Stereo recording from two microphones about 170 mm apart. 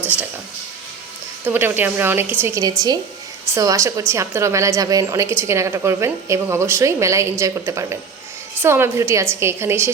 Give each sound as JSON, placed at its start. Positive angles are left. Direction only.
{"t": 1.5, "sound": "a woman's voice", "side_deg": -10}